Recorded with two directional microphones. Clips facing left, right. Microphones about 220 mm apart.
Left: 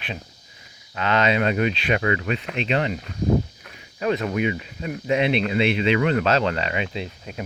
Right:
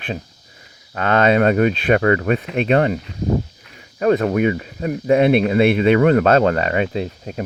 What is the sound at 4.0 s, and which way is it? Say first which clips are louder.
Speech: right 7 dB; 45° right (ahead or behind).